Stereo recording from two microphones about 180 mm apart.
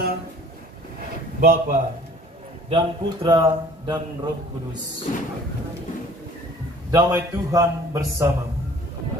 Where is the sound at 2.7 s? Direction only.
25° right (ahead or behind).